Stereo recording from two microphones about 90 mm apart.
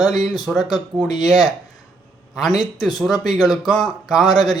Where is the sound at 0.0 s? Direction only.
Centre (ahead or behind).